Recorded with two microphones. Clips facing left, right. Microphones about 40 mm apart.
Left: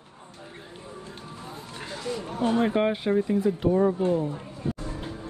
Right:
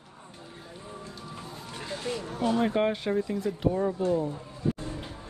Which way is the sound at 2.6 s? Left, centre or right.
Centre.